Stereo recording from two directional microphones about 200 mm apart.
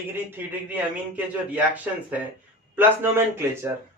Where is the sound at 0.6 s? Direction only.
10° right (ahead or behind).